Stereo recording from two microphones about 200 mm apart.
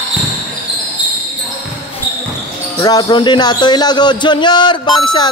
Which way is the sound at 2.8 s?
20° left (ahead or behind).